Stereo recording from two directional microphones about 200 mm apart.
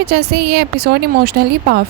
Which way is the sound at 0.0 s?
55° right (ahead or behind).